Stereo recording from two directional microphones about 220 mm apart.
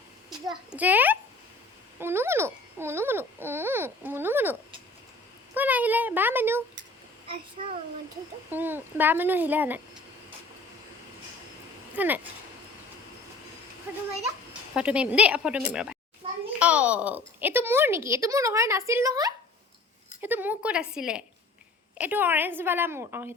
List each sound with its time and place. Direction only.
0.7 s a child's voice: 5° right (ahead or behind)
5.5 s a child's voice: 10° right (ahead or behind)
7.3 s a child's voice: 25° right (ahead or behind)
8.4 s a child's voice: 10° right (ahead or behind)
11.9 s a child's voice: 10° right (ahead or behind)
13.9 s a child's voice: 10° right (ahead or behind)